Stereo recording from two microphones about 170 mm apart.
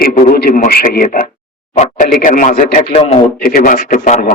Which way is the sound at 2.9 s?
40° left (ahead or behind).